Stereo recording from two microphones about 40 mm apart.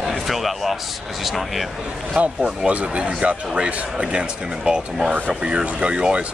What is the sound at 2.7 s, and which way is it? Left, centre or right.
Speech, right.